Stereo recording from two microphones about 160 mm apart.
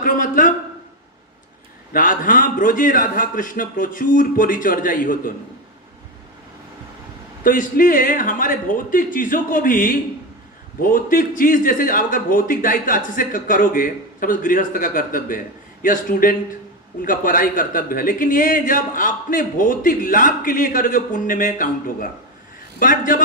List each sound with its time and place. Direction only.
0.0 s a sound: 60° left (ahead or behind)
1.9 s a man's voice: 60° left (ahead or behind)
7.4 s a man's voice: 60° left (ahead or behind)